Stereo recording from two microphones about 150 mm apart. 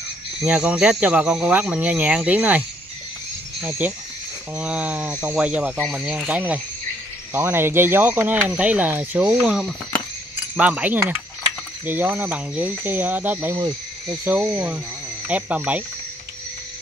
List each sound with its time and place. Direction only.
0.4 s speech: 5° right (ahead or behind)
3.6 s speech: 10° right (ahead or behind)
13.6 s speech: 25° right (ahead or behind)
14.3 s speech: 10° right (ahead or behind)